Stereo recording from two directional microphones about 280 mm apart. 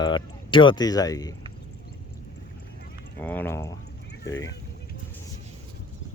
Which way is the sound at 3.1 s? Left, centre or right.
Centre.